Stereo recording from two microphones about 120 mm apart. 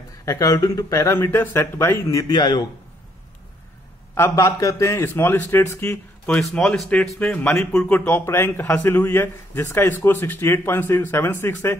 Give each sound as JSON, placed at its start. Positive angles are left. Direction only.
{"t": 0.2, "sound": "a man's voice", "side_deg": 25}
{"t": 2.2, "sound": "a man's voice", "side_deg": 40}
{"t": 4.1, "sound": "a man's voice", "side_deg": 25}
{"t": 6.5, "sound": "a man's voice", "side_deg": 5}